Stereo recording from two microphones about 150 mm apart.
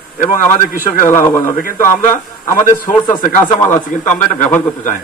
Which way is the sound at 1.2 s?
20° left (ahead or behind).